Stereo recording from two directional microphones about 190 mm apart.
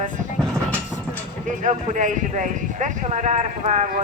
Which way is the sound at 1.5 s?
40° right (ahead or behind).